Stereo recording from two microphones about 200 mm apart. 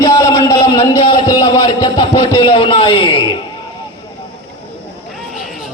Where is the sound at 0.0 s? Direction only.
15° left (ahead or behind).